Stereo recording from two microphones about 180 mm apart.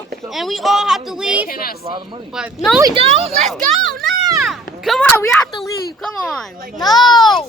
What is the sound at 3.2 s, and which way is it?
A child's voice, centre (ahead or behind).